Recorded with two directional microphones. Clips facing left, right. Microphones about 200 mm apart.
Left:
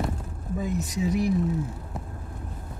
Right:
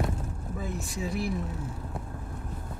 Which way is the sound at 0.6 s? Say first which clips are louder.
Left 7 dB; 15° left (ahead or behind).